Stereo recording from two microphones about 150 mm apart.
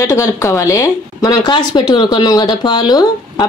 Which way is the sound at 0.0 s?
20° left (ahead or behind).